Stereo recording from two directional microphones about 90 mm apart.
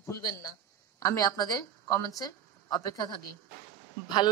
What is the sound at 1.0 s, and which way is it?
A woman's voice, 45° left (ahead or behind).